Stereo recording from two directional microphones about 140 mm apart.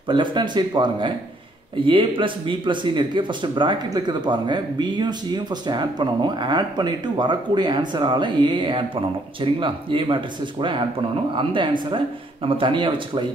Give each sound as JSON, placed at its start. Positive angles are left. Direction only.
{"t": 0.1, "sound": "speech", "side_deg": -35}